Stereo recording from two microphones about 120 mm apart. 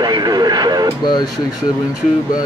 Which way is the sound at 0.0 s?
35° right (ahead or behind).